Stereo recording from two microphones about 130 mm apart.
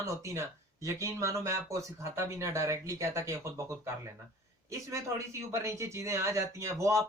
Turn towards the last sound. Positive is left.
turn(degrees=-25)  # may be behind; listen again after turning